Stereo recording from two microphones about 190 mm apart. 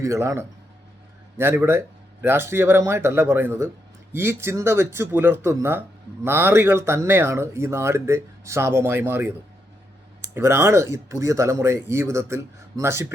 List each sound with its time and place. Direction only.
0.0 s speech: 15° right (ahead or behind)
10.3 s speech: 15° right (ahead or behind)